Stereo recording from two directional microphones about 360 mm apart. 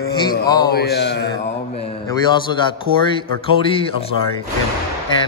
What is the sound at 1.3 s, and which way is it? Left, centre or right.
Speech, centre.